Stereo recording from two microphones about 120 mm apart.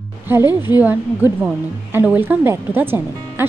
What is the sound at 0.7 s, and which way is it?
A woman's voice, 15° right (ahead or behind).